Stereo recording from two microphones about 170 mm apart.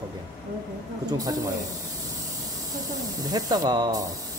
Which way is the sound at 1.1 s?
20° right (ahead or behind).